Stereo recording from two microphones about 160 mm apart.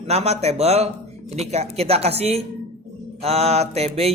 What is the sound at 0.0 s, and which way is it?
Speech, 40° right (ahead or behind).